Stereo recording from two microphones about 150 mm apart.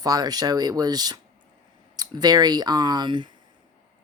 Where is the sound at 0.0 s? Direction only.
25° right (ahead or behind).